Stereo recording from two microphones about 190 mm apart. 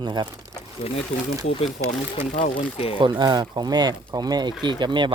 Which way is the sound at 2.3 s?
40° left (ahead or behind).